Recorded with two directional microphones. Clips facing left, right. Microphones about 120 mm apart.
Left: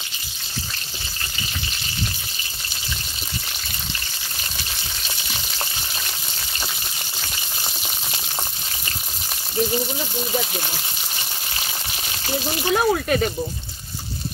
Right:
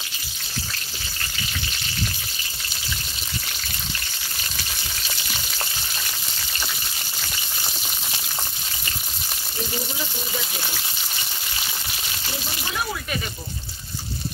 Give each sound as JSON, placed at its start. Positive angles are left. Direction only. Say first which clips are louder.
{"t": 12.7, "sound": "speech", "louder": "left 10 dB", "side_deg": 55}